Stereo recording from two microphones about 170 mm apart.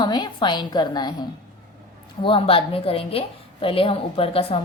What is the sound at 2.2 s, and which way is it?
A woman's voice, 30° left (ahead or behind).